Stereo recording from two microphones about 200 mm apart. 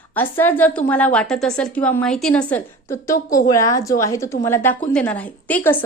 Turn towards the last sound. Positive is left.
turn(degrees=10)  # may be behind; listen again after turning